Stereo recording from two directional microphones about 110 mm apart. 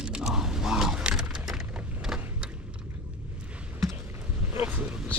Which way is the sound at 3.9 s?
15° right (ahead or behind).